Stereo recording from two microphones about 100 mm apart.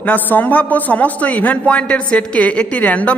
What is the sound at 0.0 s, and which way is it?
Speech, 15° left (ahead or behind).